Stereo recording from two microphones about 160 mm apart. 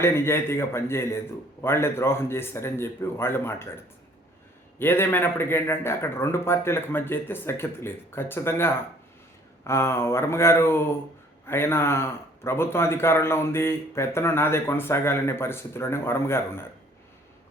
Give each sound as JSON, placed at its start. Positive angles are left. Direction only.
{"t": 0.0, "sound": "speech", "side_deg": 15}
{"t": 4.8, "sound": "speech", "side_deg": 15}